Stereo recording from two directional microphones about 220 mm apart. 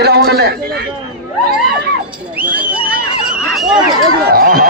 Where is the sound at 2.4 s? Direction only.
5° right (ahead or behind).